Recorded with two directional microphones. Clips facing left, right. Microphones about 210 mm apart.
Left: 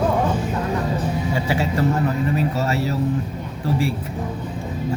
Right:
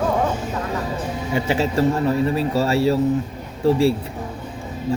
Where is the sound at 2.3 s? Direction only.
30° right (ahead or behind).